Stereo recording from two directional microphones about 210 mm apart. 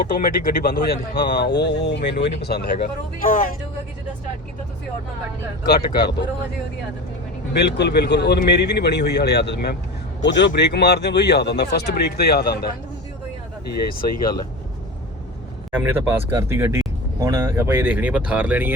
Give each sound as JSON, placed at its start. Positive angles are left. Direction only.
{"t": 0.1, "sound": "speech", "side_deg": 45}
{"t": 5.6, "sound": "speech", "side_deg": 45}
{"t": 7.5, "sound": "speech", "side_deg": 55}
{"t": 13.7, "sound": "speech", "side_deg": 45}
{"t": 15.8, "sound": "speech", "side_deg": -10}